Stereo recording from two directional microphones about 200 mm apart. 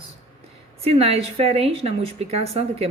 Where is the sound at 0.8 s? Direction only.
30° right (ahead or behind).